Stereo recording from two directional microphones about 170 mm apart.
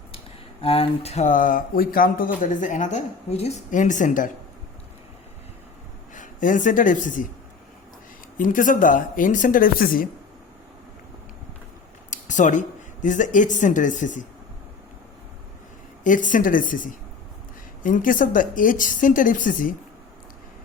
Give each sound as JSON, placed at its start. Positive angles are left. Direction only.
{"t": 0.6, "sound": "speech", "side_deg": 35}
{"t": 6.1, "sound": "speech", "side_deg": 50}
{"t": 8.4, "sound": "speech", "side_deg": 50}
{"t": 12.1, "sound": "speech", "side_deg": 45}
{"t": 16.0, "sound": "speech", "side_deg": 50}